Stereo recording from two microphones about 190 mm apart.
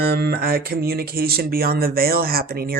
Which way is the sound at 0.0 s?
55° right (ahead or behind).